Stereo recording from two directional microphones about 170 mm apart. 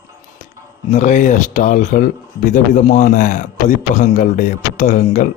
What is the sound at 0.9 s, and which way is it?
A man's voice, 45° left (ahead or behind).